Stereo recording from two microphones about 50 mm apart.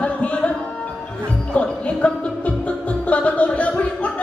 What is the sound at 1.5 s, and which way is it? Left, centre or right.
Music, left.